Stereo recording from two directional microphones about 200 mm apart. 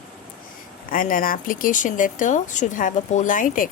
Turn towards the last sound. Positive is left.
turn(degrees=40)  # may be behind; listen again after turning